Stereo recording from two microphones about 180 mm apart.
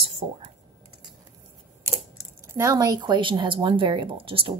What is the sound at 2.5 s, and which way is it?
Speech, 20° right (ahead or behind).